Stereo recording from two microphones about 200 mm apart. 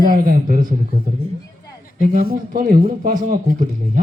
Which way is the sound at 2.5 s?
45° right (ahead or behind).